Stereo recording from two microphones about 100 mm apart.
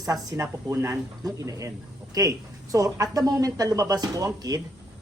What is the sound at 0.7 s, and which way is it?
A man's voice, 25° right (ahead or behind).